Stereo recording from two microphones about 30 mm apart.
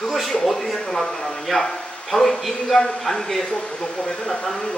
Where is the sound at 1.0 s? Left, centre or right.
Left.